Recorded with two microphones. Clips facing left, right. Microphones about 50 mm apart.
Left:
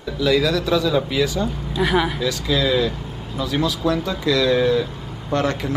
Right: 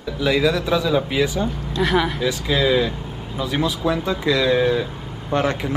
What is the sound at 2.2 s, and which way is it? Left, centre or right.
A man's voice, centre.